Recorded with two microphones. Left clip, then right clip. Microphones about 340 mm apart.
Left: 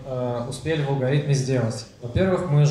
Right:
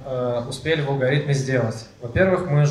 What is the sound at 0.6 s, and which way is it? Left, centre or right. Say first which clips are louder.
Speech: right 3 dB; right.